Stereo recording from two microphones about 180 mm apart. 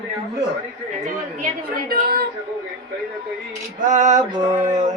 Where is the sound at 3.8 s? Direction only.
45° right (ahead or behind).